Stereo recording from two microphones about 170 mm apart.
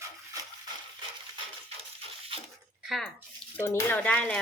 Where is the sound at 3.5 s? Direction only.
10° left (ahead or behind).